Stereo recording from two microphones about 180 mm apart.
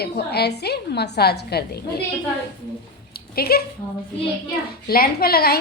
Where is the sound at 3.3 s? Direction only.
60° left (ahead or behind).